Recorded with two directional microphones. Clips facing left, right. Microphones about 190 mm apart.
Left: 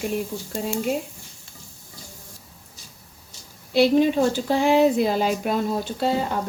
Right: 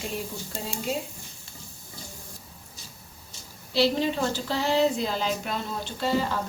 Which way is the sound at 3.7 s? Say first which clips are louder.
Left 7 dB; 55° left (ahead or behind).